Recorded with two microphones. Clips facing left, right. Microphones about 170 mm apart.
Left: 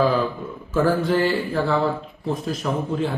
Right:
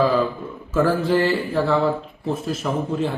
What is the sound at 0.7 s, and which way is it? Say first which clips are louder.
Speech: right 1 dB; centre (ahead or behind).